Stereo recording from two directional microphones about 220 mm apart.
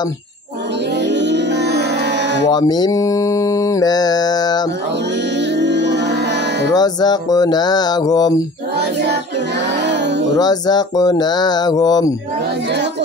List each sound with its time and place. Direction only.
1.0 s music: 50° right (ahead or behind)
2.5 s mantra: 20° left (ahead or behind)
5.6 s music: 50° right (ahead or behind)
6.7 s mantra: 20° left (ahead or behind)
10.3 s mantra: 20° left (ahead or behind)